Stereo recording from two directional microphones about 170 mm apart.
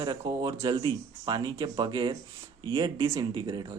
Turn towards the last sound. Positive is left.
turn(degrees=-25)  # may be behind; listen again after turning